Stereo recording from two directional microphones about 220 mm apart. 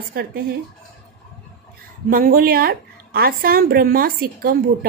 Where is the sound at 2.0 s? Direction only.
40° right (ahead or behind).